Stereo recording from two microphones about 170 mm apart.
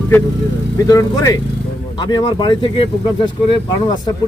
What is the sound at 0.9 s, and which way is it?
Speech, 20° left (ahead or behind).